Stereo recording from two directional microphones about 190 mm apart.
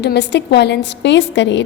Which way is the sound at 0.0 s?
65° left (ahead or behind).